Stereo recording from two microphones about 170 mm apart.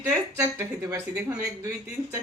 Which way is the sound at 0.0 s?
15° right (ahead or behind).